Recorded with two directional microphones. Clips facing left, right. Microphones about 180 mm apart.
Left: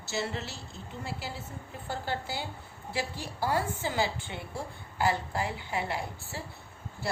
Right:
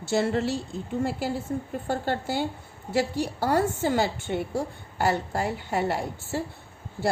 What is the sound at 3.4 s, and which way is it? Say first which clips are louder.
A woman's voice: right 6 dB; 45° right (ahead or behind).